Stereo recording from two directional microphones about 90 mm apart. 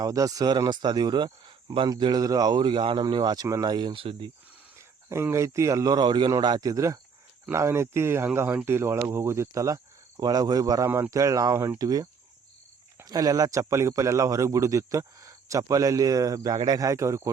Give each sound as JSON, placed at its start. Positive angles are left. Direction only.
{"t": 0.0, "sound": "speech", "side_deg": -40}
{"t": 2.0, "sound": "speech", "side_deg": -55}
{"t": 3.4, "sound": "speech", "side_deg": -40}
{"t": 4.8, "sound": "speech", "side_deg": -30}
{"t": 6.1, "sound": "speech", "side_deg": -60}
{"t": 6.4, "sound": "a man's voice", "side_deg": -45}
{"t": 13.1, "sound": "a man's voice", "side_deg": -45}